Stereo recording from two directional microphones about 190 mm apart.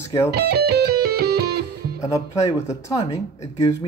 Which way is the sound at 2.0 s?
15° left (ahead or behind).